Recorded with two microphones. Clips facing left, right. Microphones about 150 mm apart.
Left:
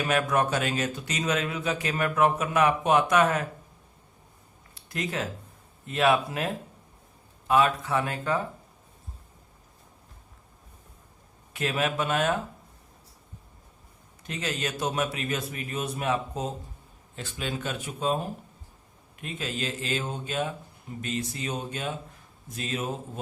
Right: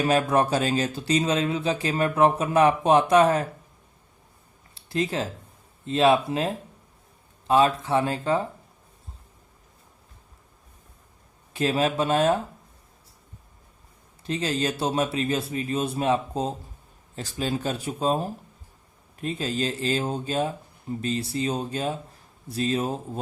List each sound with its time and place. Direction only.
0.0 s speech: 30° right (ahead or behind)
4.7 s a sound: 30° right (ahead or behind)
5.8 s speech: 25° right (ahead or behind)
11.5 s speech: 30° right (ahead or behind)
14.3 s speech: 30° right (ahead or behind)